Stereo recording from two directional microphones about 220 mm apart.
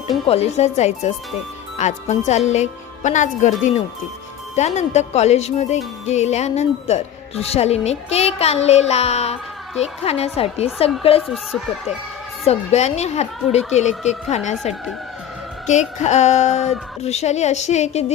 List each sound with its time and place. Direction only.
0.3 s a woman's voice: 30° left (ahead or behind)
4.5 s speech: 30° left (ahead or behind)
11.2 s speech: centre (ahead or behind)
12.5 s a woman's voice: 30° left (ahead or behind)